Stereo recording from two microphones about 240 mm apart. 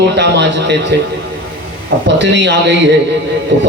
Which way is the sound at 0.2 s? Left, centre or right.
Right.